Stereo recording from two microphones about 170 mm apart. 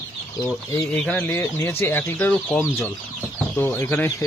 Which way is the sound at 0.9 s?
10° left (ahead or behind).